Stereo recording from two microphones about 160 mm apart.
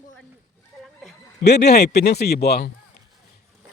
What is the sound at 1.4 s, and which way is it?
A man's voice, 90° left.